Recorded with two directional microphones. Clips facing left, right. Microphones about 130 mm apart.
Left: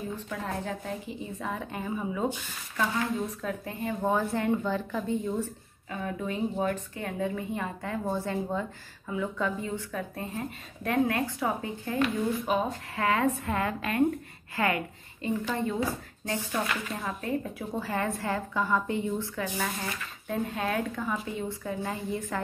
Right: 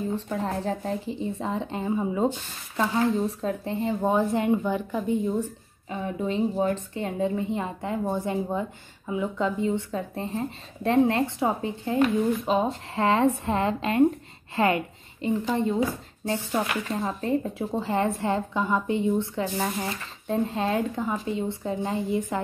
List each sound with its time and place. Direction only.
0.1 s a woman's voice: 30° right (ahead or behind)
4.0 s a woman's voice: 15° right (ahead or behind)
16.9 s a woman's voice: 35° right (ahead or behind)